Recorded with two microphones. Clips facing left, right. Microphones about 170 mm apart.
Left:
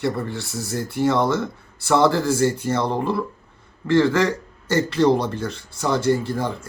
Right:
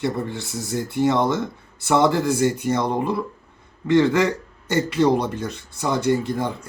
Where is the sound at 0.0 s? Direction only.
20° right (ahead or behind).